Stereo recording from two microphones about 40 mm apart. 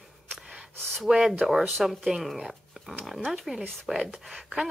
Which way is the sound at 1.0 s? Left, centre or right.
Centre.